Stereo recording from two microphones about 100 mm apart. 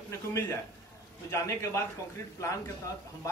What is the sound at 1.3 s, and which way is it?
A man's voice, 30° left (ahead or behind).